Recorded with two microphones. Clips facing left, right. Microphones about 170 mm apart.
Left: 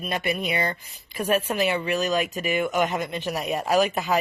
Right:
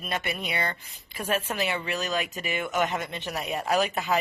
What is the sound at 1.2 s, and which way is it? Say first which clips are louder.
Speech: left 5 dB; 15° left (ahead or behind).